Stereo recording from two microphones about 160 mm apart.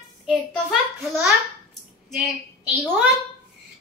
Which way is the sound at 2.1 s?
5° right (ahead or behind).